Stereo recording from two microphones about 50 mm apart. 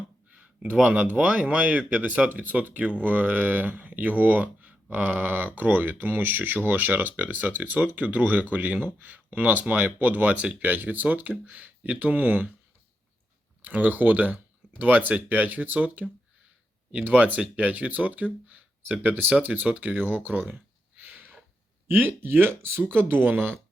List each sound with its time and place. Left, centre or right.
0.3 s speech: right
13.6 s speech: right
20.0 s a sound: right
21.8 s speech: right